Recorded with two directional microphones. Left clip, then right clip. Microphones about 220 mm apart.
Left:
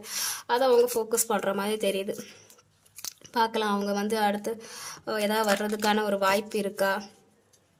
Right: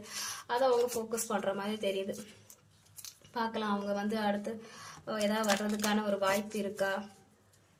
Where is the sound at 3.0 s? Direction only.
55° left (ahead or behind).